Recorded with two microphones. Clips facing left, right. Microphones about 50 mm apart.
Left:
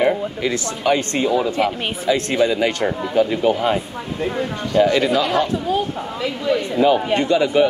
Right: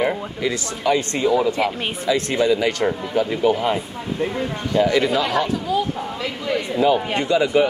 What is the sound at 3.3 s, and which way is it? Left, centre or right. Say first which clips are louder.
Speech: left 1 dB; left.